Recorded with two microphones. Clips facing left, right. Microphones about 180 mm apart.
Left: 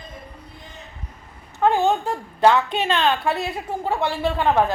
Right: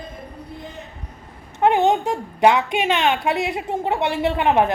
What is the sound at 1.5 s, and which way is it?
A woman's voice, 20° right (ahead or behind).